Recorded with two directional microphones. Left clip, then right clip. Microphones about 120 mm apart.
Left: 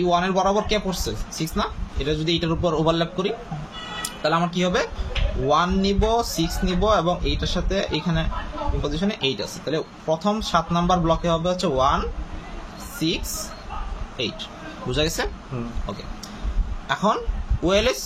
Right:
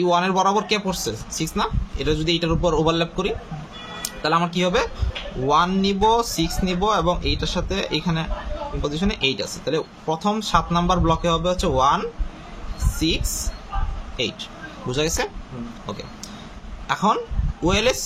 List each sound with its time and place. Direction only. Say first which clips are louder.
0.0 s speech: right 2 dB; 40° right (ahead or behind)
14.9 s speech: right 1 dB; 20° right (ahead or behind)
16.8 s speech: right 2 dB; 30° right (ahead or behind)